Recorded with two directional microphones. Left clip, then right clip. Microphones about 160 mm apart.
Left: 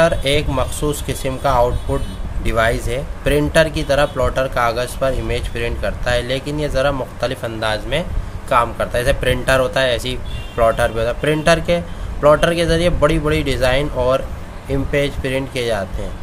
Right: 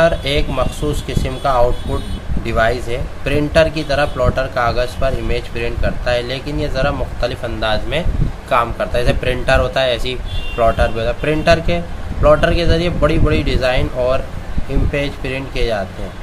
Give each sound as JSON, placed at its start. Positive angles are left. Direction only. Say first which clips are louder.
{"t": 0.0, "sound": "speech", "louder": "right 1 dB", "side_deg": 40}